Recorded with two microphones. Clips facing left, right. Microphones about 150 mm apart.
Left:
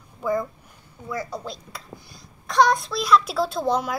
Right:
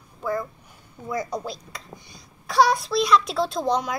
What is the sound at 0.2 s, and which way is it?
Speech, 10° left (ahead or behind).